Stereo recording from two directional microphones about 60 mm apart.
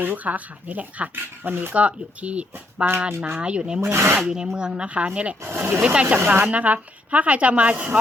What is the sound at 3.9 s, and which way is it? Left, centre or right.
Speech, right.